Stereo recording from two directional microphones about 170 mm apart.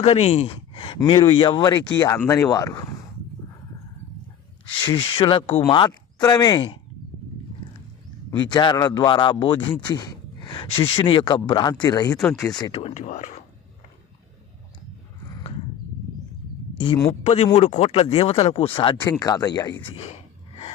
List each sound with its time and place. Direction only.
0.0 s speech: 40° left (ahead or behind); by 2.8 s 20° left (ahead or behind)
4.9 s speech: 30° left (ahead or behind)
8.3 s speech: 25° left (ahead or behind)
9.8 s a sound: 25° left (ahead or behind)
10.8 s speech: 30° left (ahead or behind)
12.1 s speech: 5° left (ahead or behind)
12.7 s speech: 40° left (ahead or behind)
16.7 s speech: 30° left (ahead or behind)